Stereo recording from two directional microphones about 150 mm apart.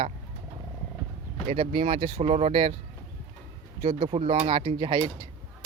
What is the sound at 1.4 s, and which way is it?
Speech, 40° right (ahead or behind).